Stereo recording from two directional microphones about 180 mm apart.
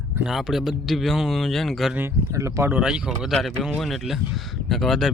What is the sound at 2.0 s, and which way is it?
Speech, 15° right (ahead or behind).